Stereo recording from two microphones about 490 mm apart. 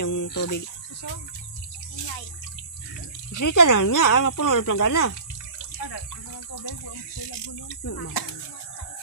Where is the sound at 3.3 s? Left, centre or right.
Left.